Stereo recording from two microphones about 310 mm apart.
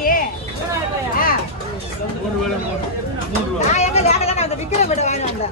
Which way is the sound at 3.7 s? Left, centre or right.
Left.